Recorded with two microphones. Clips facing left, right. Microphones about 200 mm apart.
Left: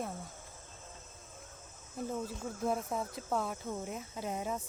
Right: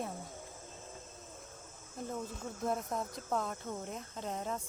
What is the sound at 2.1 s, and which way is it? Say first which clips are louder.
Speech: left 2 dB; 5° left (ahead or behind).